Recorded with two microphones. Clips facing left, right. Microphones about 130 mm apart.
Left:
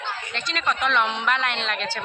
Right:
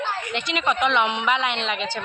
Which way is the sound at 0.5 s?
15° right (ahead or behind).